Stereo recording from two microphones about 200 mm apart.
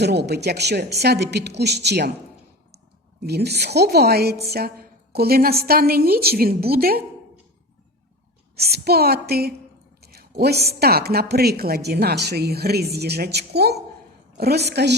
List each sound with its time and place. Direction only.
0.0 s a woman's voice: 55° right (ahead or behind)
3.2 s a woman's voice: 55° right (ahead or behind)
8.5 s a woman's voice: 50° right (ahead or behind)